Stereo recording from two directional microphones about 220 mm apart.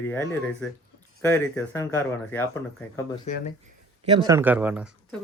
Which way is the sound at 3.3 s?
30° left (ahead or behind).